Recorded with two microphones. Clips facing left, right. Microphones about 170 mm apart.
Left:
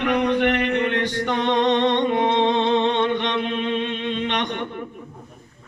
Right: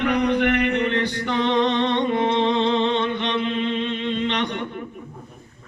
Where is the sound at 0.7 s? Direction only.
55° left (ahead or behind).